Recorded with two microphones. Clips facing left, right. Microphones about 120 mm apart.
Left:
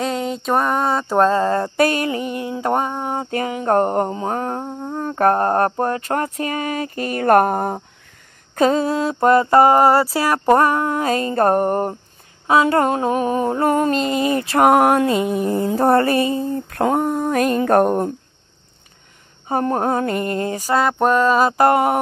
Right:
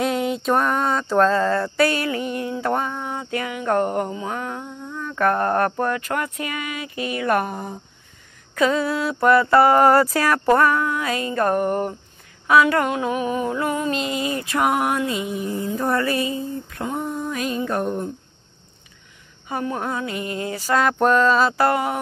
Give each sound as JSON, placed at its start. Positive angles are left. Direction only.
{"t": 0.0, "sound": "a sound", "side_deg": 0}
{"t": 0.7, "sound": "mantra", "side_deg": 10}
{"t": 1.2, "sound": "mantra", "side_deg": 35}
{"t": 8.5, "sound": "mantra", "side_deg": 35}
{"t": 12.4, "sound": "mantra", "side_deg": 30}
{"t": 14.6, "sound": "mantra", "side_deg": 50}
{"t": 15.1, "sound": "a sound", "side_deg": 55}
{"t": 19.4, "sound": "mantra", "side_deg": 45}
{"t": 20.6, "sound": "mantra", "side_deg": 10}
{"t": 21.4, "sound": "mantra", "side_deg": 45}